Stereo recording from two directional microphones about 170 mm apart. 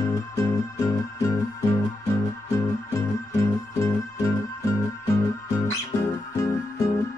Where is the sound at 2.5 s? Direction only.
15° left (ahead or behind).